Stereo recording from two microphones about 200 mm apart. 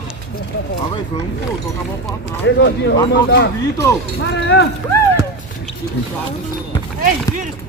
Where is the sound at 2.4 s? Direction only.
60° left (ahead or behind).